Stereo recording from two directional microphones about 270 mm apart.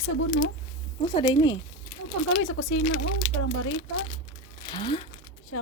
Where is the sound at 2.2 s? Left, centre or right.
Left.